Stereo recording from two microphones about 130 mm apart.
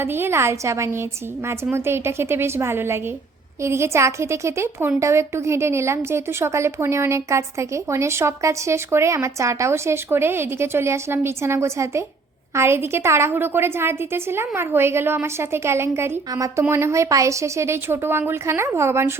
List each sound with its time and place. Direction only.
0.0 s a woman's voice: 20° right (ahead or behind)